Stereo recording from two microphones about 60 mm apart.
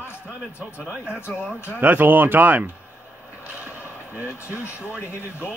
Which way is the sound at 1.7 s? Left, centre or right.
Right.